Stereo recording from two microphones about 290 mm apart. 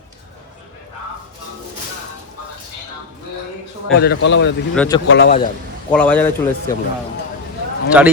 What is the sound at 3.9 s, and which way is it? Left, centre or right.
Speech, left.